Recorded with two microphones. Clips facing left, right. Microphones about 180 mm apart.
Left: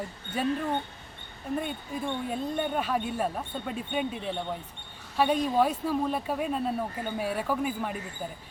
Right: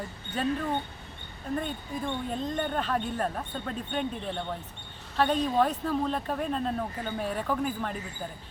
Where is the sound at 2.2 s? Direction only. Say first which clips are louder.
Left 1 dB; 10° left (ahead or behind).